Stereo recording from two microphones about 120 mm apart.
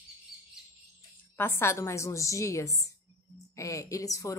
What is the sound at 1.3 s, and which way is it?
Speech, 20° left (ahead or behind).